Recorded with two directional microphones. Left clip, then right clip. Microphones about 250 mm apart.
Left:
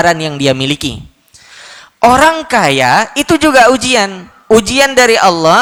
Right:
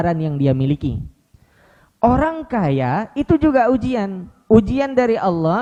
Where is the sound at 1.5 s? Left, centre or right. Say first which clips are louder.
Left 19 dB; centre.